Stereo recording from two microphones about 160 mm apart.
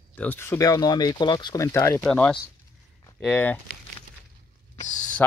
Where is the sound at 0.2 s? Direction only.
15° left (ahead or behind).